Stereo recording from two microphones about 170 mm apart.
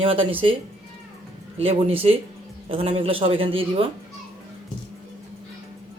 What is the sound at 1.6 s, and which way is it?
Speech, 35° right (ahead or behind).